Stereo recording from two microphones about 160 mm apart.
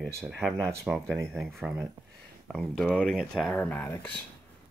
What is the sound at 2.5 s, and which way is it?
Speech, centre (ahead or behind).